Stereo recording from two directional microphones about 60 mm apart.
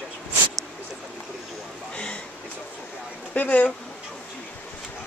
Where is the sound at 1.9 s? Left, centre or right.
Centre.